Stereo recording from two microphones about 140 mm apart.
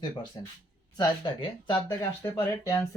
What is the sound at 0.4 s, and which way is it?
Speech, 30° left (ahead or behind).